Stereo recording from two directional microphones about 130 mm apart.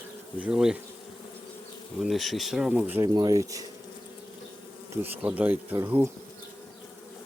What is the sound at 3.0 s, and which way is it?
Speech, 30° right (ahead or behind).